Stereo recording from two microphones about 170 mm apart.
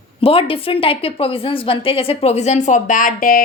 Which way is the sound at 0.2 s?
35° left (ahead or behind).